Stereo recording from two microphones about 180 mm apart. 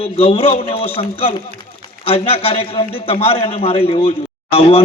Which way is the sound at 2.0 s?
35° left (ahead or behind).